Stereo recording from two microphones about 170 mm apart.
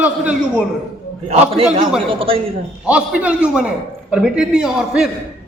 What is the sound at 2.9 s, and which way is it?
A woman's voice, 5° right (ahead or behind).